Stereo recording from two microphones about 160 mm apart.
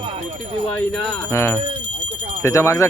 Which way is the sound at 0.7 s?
10° left (ahead or behind).